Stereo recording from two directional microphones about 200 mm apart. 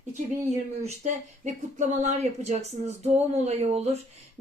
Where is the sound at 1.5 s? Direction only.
35° right (ahead or behind).